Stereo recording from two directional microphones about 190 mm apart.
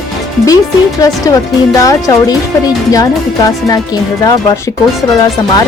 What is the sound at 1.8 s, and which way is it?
Speech, 20° left (ahead or behind).